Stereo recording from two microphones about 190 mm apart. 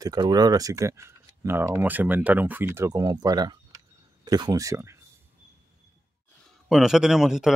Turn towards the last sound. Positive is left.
turn(degrees=0)  # may be behind; listen again after turning